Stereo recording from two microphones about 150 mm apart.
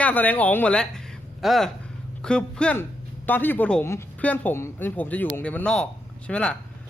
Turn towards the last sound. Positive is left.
turn(degrees=5)  # may be behind; listen again after turning